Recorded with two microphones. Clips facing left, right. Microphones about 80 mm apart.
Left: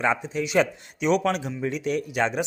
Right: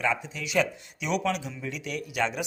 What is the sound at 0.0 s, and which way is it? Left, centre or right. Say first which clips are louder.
Speech: left 5 dB; left.